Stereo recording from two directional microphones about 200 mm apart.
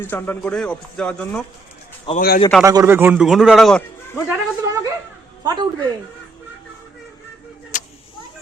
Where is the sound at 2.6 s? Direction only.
15° right (ahead or behind); by 4.2 s 5° left (ahead or behind).